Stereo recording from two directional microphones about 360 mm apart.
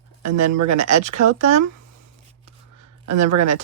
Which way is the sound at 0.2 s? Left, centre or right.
Right.